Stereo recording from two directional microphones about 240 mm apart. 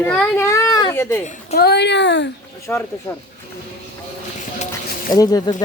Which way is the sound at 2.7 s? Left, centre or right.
Centre.